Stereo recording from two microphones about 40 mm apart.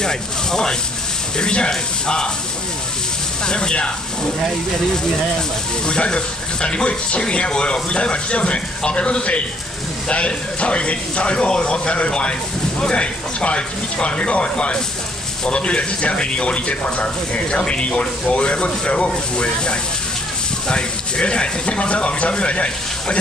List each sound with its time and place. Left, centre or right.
0.0 s speech: centre
3.4 s speech: left
5.9 s speech: left